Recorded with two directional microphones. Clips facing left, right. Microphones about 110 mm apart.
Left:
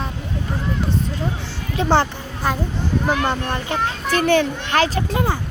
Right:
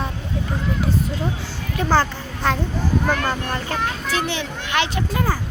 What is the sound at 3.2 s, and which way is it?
Speech, 20° left (ahead or behind).